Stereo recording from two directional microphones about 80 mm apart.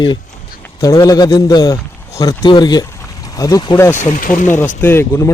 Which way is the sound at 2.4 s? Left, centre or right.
Left.